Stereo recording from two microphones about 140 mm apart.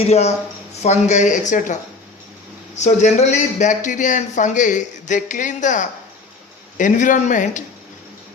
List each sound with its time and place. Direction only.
0.0 s speech: 50° left (ahead or behind)